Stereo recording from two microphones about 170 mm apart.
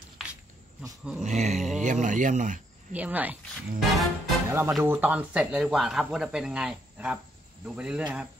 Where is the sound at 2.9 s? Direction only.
10° right (ahead or behind).